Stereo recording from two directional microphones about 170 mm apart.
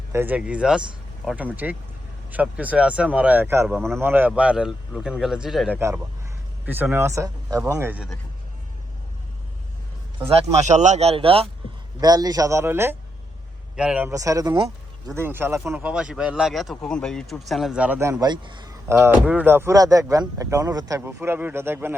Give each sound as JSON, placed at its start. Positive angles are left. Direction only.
{"t": 0.1, "sound": "speech", "side_deg": -10}
{"t": 3.7, "sound": "speech", "side_deg": 0}
{"t": 3.9, "sound": "speech", "side_deg": -10}
{"t": 10.2, "sound": "speech", "side_deg": -40}
{"t": 11.9, "sound": "speech", "side_deg": -20}
{"t": 14.1, "sound": "speech", "side_deg": -20}
{"t": 18.9, "sound": "speech", "side_deg": -15}
{"t": 21.2, "sound": "speech", "side_deg": -10}